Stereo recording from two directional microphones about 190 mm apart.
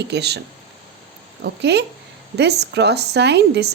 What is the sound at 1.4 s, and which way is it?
A woman's voice, 65° right (ahead or behind).